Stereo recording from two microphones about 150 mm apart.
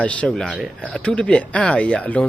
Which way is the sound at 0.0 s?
10° left (ahead or behind).